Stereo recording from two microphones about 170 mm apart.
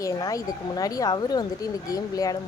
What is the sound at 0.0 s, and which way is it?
Speech, 20° left (ahead or behind).